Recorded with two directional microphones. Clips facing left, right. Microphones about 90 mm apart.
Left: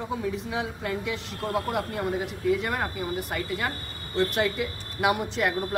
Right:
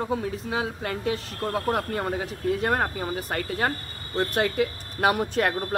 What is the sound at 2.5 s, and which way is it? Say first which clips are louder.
A woman's voice: right 2 dB; 40° right (ahead or behind).